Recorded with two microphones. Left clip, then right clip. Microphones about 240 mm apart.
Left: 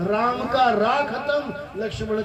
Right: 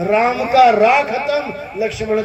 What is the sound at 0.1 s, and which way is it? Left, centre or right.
A man's voice, right.